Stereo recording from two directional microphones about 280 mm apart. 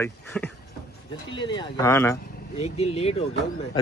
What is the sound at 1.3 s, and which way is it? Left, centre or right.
Speech, centre.